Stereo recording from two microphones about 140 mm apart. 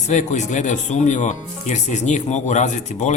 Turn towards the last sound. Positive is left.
turn(degrees=60)  # may be behind; listen again after turning